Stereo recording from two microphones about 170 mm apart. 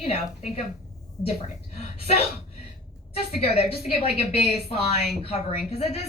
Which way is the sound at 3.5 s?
35° left (ahead or behind).